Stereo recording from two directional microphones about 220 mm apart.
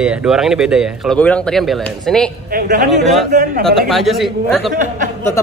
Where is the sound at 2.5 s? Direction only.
40° right (ahead or behind).